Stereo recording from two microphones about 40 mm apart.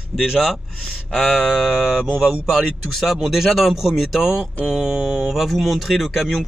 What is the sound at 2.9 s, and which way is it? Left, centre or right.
Speech, centre.